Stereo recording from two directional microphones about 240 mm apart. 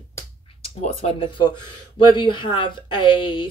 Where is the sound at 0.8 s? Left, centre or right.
Left.